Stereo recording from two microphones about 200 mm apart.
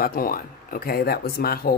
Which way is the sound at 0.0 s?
45° left (ahead or behind).